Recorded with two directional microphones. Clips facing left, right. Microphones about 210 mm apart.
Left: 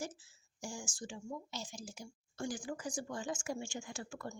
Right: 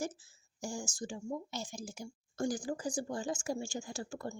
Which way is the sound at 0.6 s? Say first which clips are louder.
Right 5 dB; 40° right (ahead or behind).